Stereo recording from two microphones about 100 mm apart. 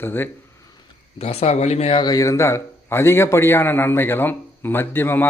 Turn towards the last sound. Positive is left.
turn(degrees=20)  # may be behind; listen again after turning